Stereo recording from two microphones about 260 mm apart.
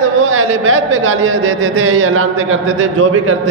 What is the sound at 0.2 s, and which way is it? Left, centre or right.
A man's voice, right.